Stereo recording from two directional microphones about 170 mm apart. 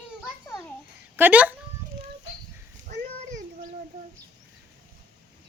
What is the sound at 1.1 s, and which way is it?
Speech, 10° right (ahead or behind).